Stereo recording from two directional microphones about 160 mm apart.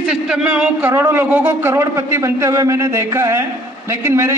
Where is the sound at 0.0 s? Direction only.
5° right (ahead or behind).